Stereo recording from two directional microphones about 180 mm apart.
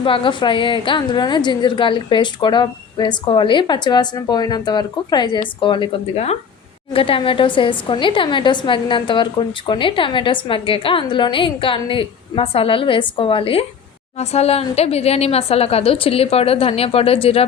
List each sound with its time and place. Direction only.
0.0 s a woman's voice: 30° left (ahead or behind)